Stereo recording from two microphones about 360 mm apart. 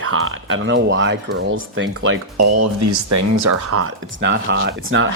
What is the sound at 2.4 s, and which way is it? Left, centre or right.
Speech, right.